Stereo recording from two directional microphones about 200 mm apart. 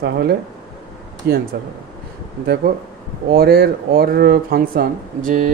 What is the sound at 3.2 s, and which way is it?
Speech, 50° right (ahead or behind).